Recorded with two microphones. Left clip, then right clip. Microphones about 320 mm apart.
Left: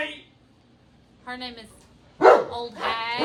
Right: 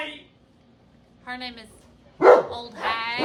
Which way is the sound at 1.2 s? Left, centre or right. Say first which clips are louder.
Right 1 dB; centre.